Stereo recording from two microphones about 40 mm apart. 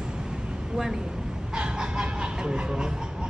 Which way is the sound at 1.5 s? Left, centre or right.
Right.